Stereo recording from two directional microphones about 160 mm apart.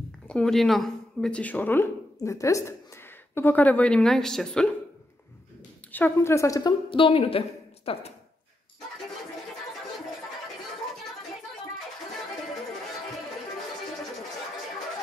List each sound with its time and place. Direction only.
0.3 s a woman's voice: 5° left (ahead or behind)
5.9 s a woman's voice: 10° left (ahead or behind)
6.9 s a woman's voice: 35° left (ahead or behind)